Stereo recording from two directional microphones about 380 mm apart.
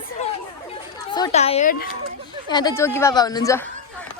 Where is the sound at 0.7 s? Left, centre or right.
Centre.